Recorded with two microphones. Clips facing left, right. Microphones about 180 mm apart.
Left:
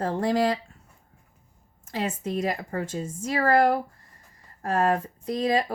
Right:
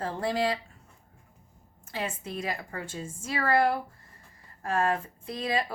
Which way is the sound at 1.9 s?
40° left (ahead or behind).